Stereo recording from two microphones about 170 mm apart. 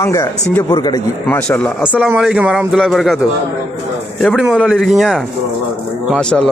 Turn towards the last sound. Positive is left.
turn(degrees=5)  # may be behind; listen again after turning